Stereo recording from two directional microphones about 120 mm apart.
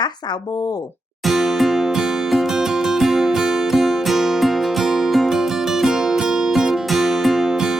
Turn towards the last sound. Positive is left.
turn(degrees=-5)  # may be behind; listen again after turning